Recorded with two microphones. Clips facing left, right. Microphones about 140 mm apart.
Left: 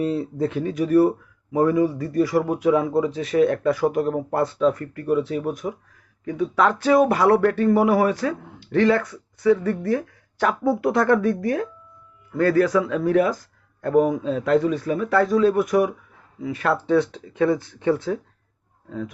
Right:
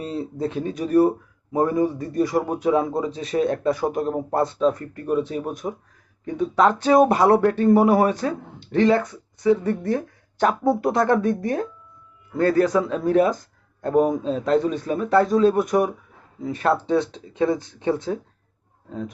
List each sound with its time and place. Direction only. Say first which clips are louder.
0.0 s speech: left 4 dB; 20° right (ahead or behind)